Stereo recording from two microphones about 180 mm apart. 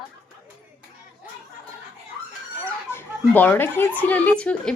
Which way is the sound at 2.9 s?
10° left (ahead or behind).